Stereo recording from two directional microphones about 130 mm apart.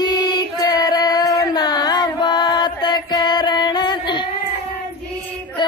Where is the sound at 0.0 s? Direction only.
35° left (ahead or behind).